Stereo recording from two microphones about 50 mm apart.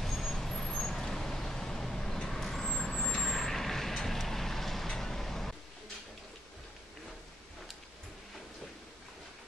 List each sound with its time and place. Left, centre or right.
0.0 s vehicle: centre